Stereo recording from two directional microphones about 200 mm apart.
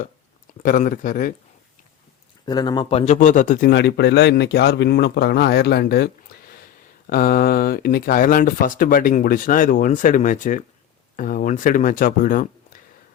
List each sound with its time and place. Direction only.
0.6 s speech: 45° left (ahead or behind)
2.5 s a man's voice: 20° left (ahead or behind); by 3.7 s 40° left (ahead or behind)
3.7 s speech: 60° left (ahead or behind); by 12.8 s 45° left (ahead or behind)